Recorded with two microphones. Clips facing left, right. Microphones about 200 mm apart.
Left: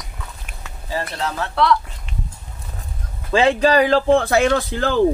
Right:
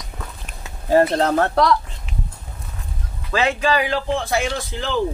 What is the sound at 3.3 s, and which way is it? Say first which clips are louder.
Speech: left 5 dB; 35° left (ahead or behind).